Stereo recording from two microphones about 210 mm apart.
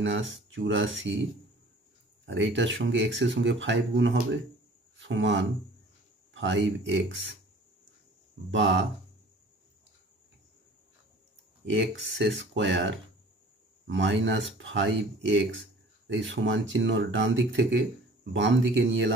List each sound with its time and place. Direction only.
0.0 s speech: 65° right (ahead or behind)
2.2 s speech: 60° right (ahead or behind)
8.5 s speech: 60° right (ahead or behind)
11.7 s speech: 60° right (ahead or behind)